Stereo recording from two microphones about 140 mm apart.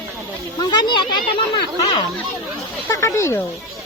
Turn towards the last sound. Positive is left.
turn(degrees=20)  # may be behind; listen again after turning